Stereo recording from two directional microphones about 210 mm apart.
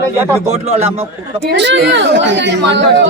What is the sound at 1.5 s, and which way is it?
Speech, 55° right (ahead or behind).